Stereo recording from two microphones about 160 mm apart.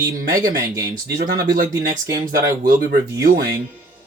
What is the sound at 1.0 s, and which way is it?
Speech, 70° right (ahead or behind).